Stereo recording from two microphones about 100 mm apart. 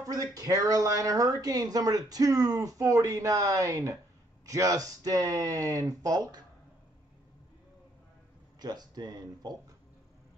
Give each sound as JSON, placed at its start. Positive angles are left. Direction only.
{"t": 0.0, "sound": "speech", "side_deg": -35}
{"t": 8.5, "sound": "speech", "side_deg": -40}